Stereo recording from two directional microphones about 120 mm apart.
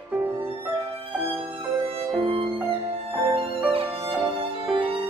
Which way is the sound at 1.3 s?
50° right (ahead or behind).